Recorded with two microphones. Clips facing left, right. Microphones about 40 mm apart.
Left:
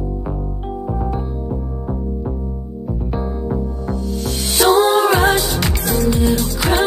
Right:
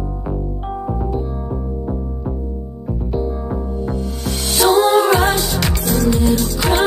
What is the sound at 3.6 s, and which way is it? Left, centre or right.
Music, right.